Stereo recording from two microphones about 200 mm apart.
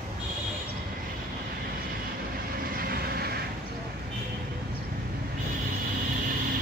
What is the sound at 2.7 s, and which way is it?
Vehicle, 50° right (ahead or behind).